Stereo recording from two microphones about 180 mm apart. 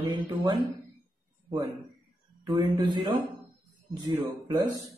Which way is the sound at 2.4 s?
25° right (ahead or behind).